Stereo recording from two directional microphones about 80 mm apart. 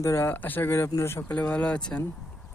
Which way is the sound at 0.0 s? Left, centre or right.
Left.